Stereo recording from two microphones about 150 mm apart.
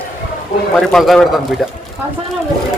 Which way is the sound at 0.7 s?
Centre (ahead or behind).